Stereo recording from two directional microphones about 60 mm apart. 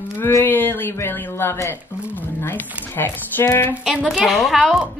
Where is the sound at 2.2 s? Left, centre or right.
Left.